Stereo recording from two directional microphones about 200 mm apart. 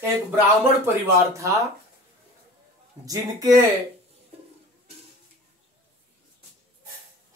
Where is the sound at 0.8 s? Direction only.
15° right (ahead or behind).